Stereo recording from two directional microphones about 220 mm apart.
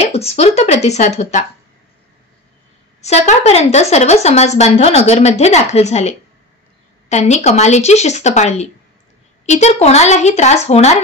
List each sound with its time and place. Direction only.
0.1 s speech: 30° left (ahead or behind)
3.0 s speech: 30° left (ahead or behind)